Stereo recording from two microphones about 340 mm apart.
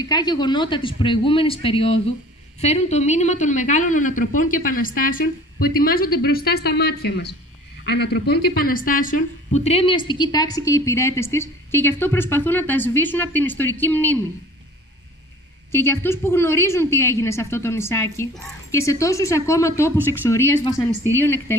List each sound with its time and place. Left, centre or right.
0.0 s a woman's voice: centre
15.7 s a woman's voice: centre